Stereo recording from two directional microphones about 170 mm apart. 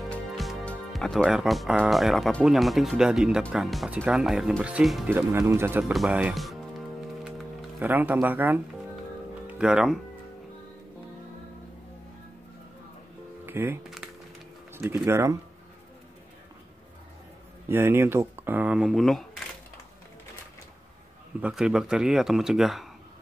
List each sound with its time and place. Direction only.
0.1 s speech: 5° left (ahead or behind)
7.8 s speech: 10° right (ahead or behind)
13.5 s speech: 10° right (ahead or behind)
14.7 s speech: 15° right (ahead or behind)
17.6 s speech: 15° right (ahead or behind)
21.4 s speech: 5° right (ahead or behind)